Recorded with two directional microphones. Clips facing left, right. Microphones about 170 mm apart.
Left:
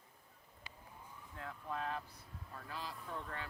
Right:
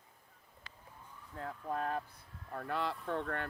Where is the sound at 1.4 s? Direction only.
40° right (ahead or behind).